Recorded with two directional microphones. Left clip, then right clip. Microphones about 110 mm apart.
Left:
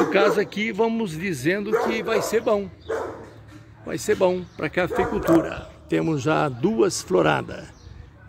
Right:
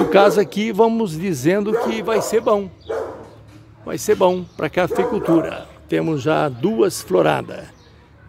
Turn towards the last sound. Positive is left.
turn(degrees=-5)  # may be behind; listen again after turning